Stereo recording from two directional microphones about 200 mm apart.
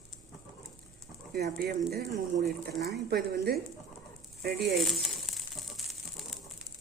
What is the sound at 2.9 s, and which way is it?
A woman's voice, 50° right (ahead or behind).